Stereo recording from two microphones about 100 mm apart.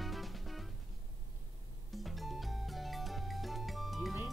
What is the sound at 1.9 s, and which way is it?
Music, centre (ahead or behind).